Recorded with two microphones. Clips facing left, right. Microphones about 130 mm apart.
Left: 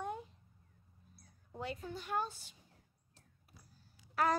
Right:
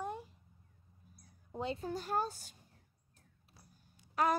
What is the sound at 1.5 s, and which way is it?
Speech, 25° right (ahead or behind).